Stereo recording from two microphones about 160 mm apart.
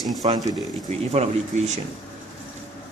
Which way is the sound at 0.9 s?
45° right (ahead or behind).